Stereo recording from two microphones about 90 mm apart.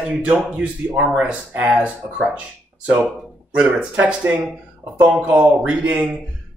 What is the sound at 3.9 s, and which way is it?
Speech, 20° right (ahead or behind).